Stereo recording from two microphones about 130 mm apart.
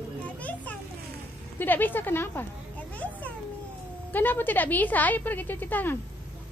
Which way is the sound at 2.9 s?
10° left (ahead or behind).